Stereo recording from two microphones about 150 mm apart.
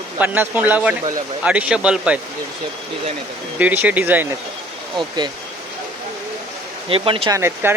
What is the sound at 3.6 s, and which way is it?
Speech, 10° right (ahead or behind).